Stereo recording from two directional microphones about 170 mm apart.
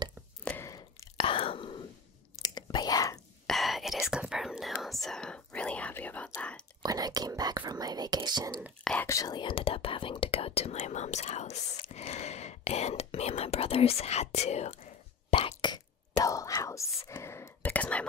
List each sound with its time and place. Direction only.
0.5 s a sound: 15° left (ahead or behind)
1.1 s whispering: 30° left (ahead or behind)
3.4 s whispering: centre (ahead or behind)
6.8 s whispering: 20° right (ahead or behind)
8.8 s speech: 10° left (ahead or behind); by 14.9 s 40° left (ahead or behind)
15.3 s whispering: 25° left (ahead or behind); by 18.0 s 10° left (ahead or behind)